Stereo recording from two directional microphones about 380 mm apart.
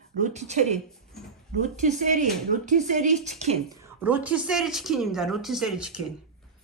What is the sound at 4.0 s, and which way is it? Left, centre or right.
Speech, centre.